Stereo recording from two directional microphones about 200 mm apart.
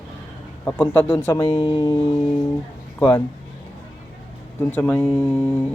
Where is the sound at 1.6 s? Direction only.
25° left (ahead or behind).